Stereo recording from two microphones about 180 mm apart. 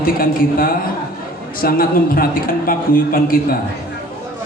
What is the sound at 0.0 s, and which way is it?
A man's voice, 50° left (ahead or behind).